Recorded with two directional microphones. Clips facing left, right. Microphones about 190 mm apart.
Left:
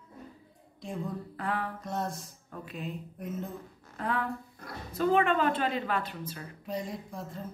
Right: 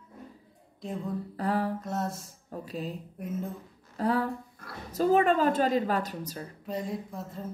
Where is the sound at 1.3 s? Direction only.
40° right (ahead or behind).